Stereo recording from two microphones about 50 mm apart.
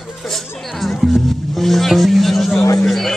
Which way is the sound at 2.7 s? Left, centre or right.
Centre.